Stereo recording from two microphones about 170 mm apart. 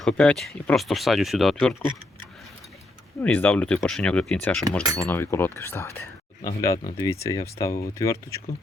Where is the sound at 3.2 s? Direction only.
10° left (ahead or behind).